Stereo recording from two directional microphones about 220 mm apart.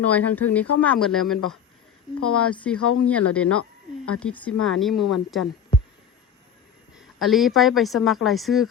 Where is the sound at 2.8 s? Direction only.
90° left.